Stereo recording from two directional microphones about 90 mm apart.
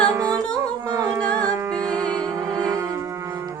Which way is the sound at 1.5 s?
45° right (ahead or behind).